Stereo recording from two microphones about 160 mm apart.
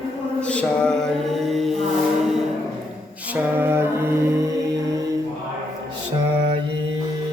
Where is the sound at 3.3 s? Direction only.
15° right (ahead or behind).